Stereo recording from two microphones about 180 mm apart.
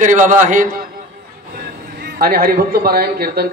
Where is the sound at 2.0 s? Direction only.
55° right (ahead or behind).